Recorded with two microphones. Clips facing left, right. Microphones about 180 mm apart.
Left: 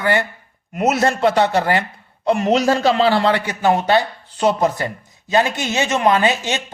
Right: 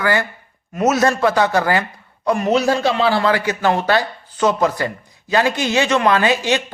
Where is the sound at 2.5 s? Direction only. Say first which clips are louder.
Left 1 dB; 40° left (ahead or behind).